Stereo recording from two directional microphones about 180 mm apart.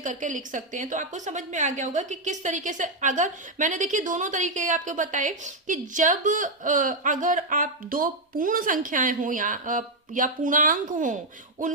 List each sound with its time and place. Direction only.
0.0 s a woman's voice: 45° right (ahead or behind)